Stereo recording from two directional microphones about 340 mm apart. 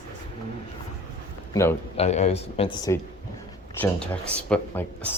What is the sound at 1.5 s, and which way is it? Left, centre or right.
Speech, centre.